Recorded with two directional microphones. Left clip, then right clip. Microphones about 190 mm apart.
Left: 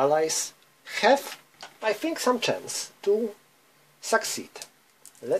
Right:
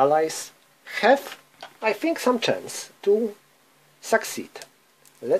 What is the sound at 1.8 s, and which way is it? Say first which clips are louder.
Speech: right 3 dB; 35° right (ahead or behind).